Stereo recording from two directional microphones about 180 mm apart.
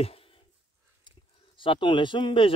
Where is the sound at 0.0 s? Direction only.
35° left (ahead or behind).